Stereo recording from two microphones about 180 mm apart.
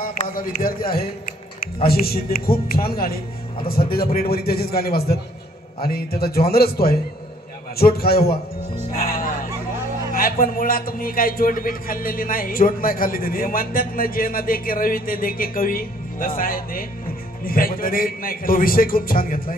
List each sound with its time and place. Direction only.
0.0 s a man's voice: 50° left (ahead or behind)
8.9 s music: 55° left (ahead or behind)
10.1 s a man's voice: 50° left (ahead or behind)